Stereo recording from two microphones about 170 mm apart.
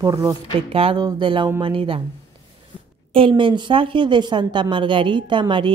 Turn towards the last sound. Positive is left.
turn(degrees=-30)  # may be behind; listen again after turning